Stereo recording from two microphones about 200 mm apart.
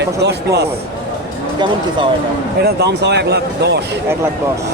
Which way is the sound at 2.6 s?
55° right (ahead or behind).